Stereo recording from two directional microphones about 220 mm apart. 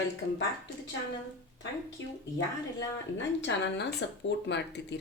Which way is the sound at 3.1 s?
55° left (ahead or behind).